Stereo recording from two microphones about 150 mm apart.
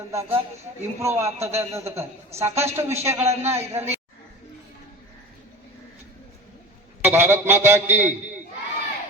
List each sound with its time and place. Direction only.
0.1 s a man's voice: 20° right (ahead or behind)
7.0 s a man's voice: 15° right (ahead or behind)